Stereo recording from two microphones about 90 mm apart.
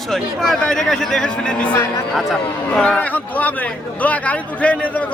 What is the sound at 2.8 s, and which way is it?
A man's voice, 15° left (ahead or behind).